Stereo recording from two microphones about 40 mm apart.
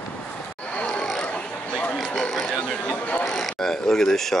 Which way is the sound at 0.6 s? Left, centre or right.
Left.